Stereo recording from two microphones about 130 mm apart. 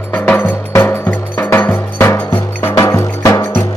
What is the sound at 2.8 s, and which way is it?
Music, 25° left (ahead or behind).